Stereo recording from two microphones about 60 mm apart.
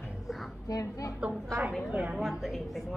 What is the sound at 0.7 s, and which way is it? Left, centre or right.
Speech, left.